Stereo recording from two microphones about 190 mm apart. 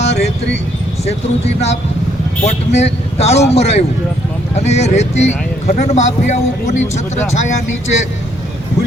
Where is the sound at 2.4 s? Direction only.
35° left (ahead or behind).